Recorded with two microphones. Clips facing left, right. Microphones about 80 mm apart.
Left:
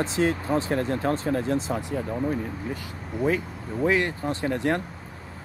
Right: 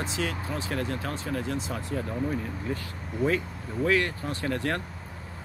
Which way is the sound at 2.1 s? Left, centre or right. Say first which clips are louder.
Left 4 dB; centre.